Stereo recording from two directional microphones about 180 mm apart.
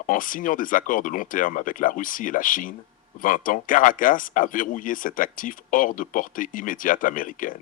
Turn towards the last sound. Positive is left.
turn(degrees=50)  # may be behind; listen again after turning